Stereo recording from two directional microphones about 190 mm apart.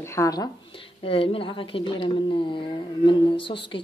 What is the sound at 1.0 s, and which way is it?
Speech, 30° left (ahead or behind).